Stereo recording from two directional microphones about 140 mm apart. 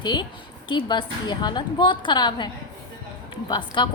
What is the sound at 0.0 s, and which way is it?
A woman's voice, 30° left (ahead or behind).